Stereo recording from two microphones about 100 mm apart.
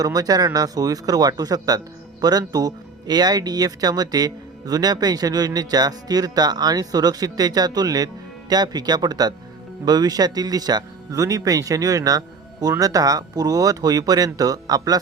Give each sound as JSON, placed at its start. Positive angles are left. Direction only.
{"t": 0.0, "sound": "speech", "side_deg": -40}